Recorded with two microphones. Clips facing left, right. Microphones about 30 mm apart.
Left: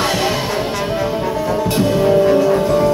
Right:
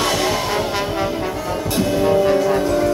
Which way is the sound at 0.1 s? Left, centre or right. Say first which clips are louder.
Left 1 dB; left.